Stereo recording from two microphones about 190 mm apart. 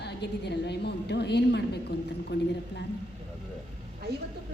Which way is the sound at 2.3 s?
70° left (ahead or behind).